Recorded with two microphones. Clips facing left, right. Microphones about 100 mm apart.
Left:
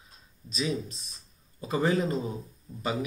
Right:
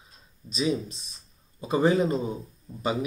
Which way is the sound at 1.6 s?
25° right (ahead or behind).